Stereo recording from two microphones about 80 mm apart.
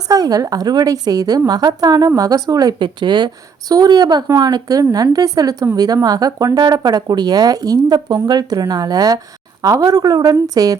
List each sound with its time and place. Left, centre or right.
0.1 s a woman's voice: right
2.7 s a woman's voice: right